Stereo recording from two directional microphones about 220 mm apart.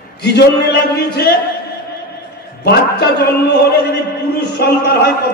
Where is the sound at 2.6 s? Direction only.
45° left (ahead or behind).